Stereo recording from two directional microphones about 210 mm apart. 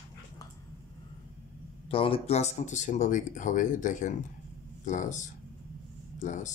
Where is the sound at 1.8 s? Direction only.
25° left (ahead or behind).